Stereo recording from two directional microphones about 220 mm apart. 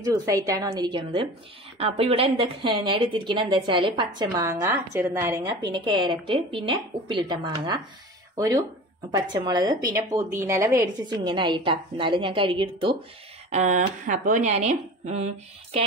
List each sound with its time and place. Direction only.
0.0 s a woman's voice: 15° right (ahead or behind); by 15.8 s 30° right (ahead or behind)